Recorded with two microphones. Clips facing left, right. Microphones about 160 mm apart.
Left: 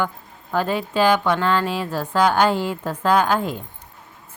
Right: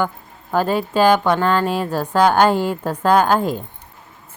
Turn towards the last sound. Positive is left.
turn(degrees=-40)  # may be behind; listen again after turning